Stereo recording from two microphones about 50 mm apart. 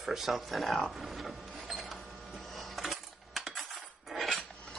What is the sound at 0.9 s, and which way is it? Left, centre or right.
Printer, centre.